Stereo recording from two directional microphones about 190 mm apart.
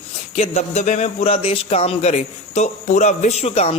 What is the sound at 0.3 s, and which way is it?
A man's voice, 35° left (ahead or behind).